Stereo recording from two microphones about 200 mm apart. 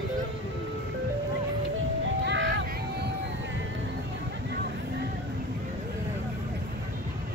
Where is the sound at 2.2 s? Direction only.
65° right (ahead or behind).